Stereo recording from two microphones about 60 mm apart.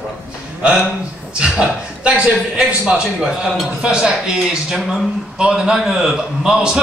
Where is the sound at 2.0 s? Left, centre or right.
Centre.